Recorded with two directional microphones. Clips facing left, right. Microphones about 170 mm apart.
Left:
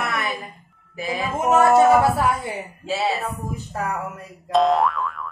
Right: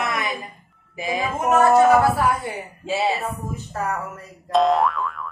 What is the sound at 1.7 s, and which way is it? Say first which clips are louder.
Speech: even; 20° left (ahead or behind).